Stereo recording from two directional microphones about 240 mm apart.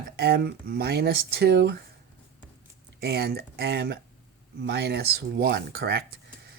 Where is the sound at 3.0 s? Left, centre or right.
Right.